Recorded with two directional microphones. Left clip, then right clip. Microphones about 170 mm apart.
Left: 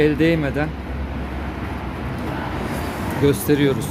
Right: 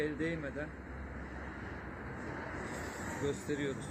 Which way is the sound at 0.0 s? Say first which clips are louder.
Left 19 dB; 55° left (ahead or behind).